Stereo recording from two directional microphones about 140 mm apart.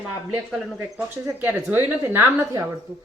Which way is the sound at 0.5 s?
10° right (ahead or behind).